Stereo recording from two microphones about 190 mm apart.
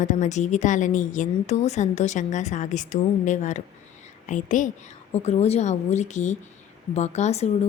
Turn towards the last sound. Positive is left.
turn(degrees=35)  # may be behind; listen again after turning